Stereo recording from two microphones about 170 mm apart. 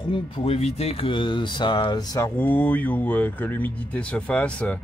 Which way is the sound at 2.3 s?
10° left (ahead or behind).